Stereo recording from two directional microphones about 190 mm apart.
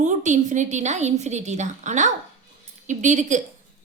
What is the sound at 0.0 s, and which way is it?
A woman's voice, 40° right (ahead or behind).